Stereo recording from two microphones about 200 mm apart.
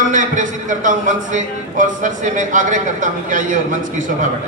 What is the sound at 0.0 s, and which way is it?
A man's voice, 40° right (ahead or behind).